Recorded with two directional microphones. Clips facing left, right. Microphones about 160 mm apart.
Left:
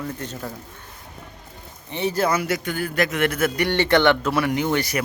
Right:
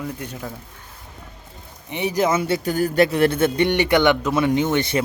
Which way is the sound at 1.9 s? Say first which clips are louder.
Right 2 dB; 15° right (ahead or behind).